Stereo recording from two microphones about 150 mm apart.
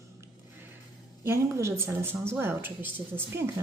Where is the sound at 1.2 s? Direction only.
20° right (ahead or behind).